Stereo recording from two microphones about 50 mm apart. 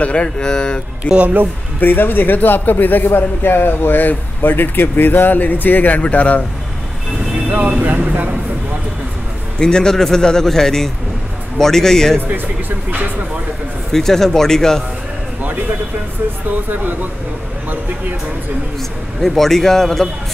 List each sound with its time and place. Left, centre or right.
0.0 s speech: left
1.8 s a man's voice: left
7.4 s speech: right
9.6 s a man's voice: centre
12.4 s speech: right
13.9 s a man's voice: centre
18.8 s a man's voice: centre